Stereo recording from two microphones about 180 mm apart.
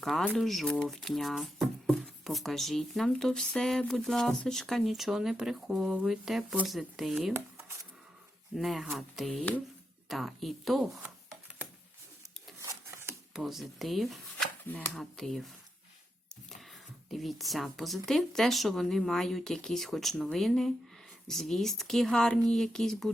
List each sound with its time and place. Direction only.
0.0 s speech: centre (ahead or behind)
8.5 s speech: centre (ahead or behind)
13.3 s speech: centre (ahead or behind)
17.1 s speech: centre (ahead or behind)